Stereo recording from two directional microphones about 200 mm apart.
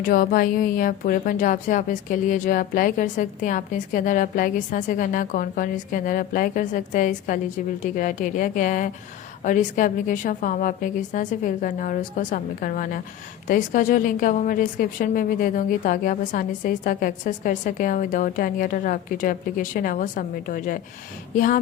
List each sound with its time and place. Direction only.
0.0 s a woman's voice: 45° left (ahead or behind)